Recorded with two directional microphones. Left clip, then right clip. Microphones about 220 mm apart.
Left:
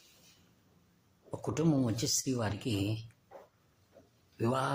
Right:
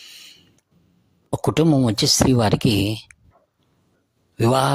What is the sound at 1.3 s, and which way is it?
Speech, 45° right (ahead or behind).